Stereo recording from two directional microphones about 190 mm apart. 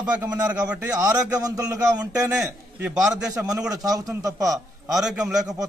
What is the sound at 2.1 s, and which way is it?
A man's voice, 5° right (ahead or behind).